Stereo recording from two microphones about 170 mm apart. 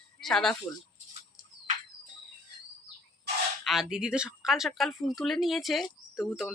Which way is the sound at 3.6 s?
Centre (ahead or behind).